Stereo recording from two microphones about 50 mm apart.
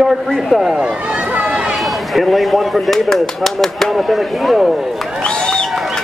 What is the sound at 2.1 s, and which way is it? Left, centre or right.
Speech, centre.